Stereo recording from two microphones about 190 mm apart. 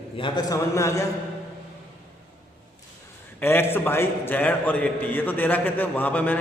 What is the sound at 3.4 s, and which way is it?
A man's voice, 10° left (ahead or behind).